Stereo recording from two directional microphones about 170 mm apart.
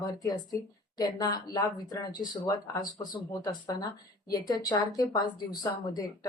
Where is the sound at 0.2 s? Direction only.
20° left (ahead or behind).